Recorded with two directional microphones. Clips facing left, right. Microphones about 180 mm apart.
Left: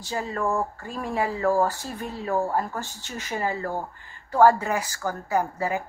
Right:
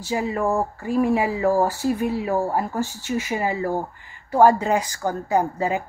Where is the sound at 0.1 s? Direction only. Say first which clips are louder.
Right 4 dB; 15° right (ahead or behind).